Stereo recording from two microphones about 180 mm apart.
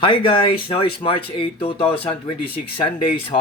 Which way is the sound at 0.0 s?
30° left (ahead or behind).